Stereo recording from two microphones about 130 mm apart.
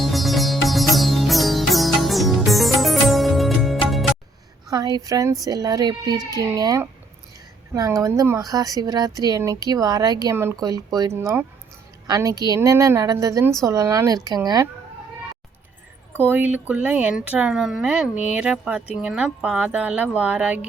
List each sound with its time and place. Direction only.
0.0 s music: centre (ahead or behind)
4.7 s a woman's voice: 30° right (ahead or behind)
16.1 s speech: 15° right (ahead or behind)